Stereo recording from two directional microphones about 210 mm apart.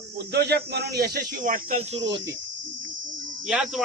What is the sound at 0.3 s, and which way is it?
Speech, 50° right (ahead or behind).